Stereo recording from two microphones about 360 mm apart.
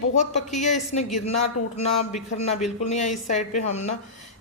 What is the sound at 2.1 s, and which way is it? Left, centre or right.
A woman's voice, centre.